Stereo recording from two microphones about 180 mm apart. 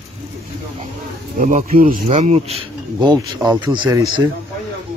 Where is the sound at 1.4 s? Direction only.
50° right (ahead or behind).